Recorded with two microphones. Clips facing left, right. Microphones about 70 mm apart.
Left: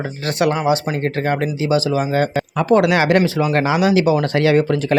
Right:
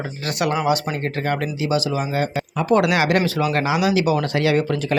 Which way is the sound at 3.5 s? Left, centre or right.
Left.